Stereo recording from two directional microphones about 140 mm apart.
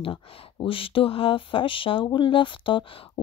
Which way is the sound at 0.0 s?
40° left (ahead or behind).